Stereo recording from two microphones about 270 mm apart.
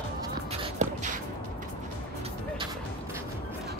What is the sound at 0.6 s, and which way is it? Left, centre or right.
Shuffle, right.